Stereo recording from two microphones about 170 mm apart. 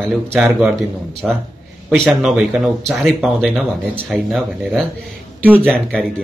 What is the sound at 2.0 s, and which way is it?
Speech, centre (ahead or behind).